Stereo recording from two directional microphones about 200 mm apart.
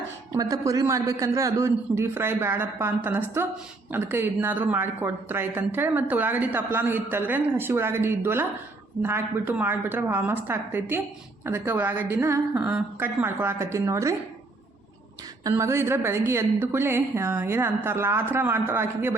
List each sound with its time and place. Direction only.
0.3 s speech: 15° right (ahead or behind)
15.4 s speech: 15° right (ahead or behind)